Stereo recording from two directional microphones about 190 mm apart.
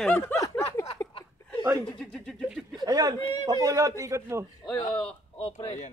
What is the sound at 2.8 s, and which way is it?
A man's voice, 20° right (ahead or behind).